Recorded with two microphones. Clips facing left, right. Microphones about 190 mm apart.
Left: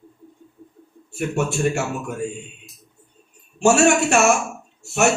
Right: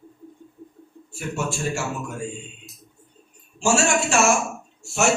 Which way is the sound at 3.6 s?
60° left (ahead or behind).